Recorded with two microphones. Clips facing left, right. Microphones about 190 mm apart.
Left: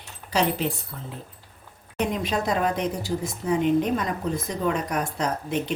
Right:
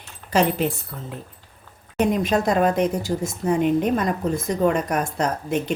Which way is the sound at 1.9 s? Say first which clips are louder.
Right 6 dB; 45° right (ahead or behind).